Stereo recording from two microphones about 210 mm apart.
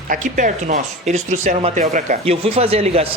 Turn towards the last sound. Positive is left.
turn(degrees=-30)  # may be behind; listen again after turning